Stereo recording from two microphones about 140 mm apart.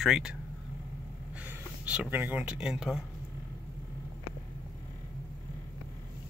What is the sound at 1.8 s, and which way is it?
Speech, 10° right (ahead or behind).